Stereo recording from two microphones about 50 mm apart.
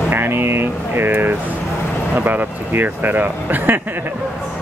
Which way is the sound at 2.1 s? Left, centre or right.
Right.